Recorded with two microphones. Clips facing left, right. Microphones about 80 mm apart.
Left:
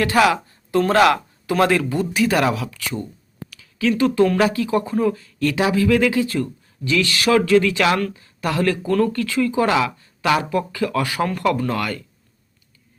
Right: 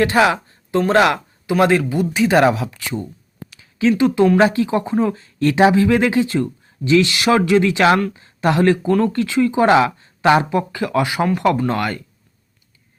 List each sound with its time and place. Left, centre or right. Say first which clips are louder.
0.0 s speech: right 2 dB; right
3.5 s a sound: right 4 dB; right
4.4 s speech: right 3 dB; right